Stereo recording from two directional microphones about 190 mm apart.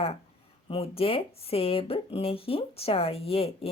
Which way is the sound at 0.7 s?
30° left (ahead or behind).